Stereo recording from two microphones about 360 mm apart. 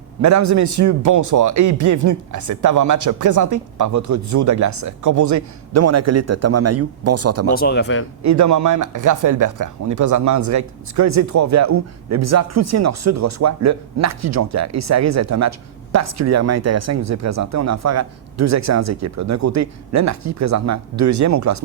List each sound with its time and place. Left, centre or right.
0.2 s speech: right
7.5 s speech: left
8.2 s speech: right